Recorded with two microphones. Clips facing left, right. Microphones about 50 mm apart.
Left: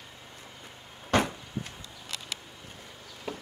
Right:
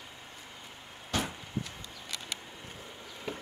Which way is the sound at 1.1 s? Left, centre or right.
Left.